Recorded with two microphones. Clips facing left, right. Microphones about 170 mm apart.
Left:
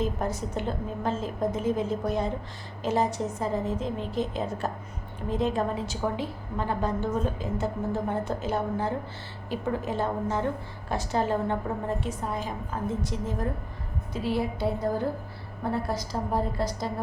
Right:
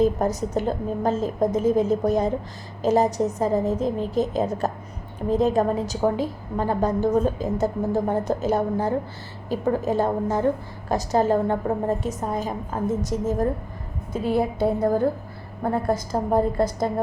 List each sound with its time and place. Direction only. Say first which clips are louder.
0.0 s a woman's voice: right 8 dB; 40° right (ahead or behind)